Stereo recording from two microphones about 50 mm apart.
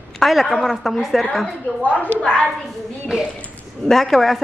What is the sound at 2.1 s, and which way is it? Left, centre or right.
Speech, centre.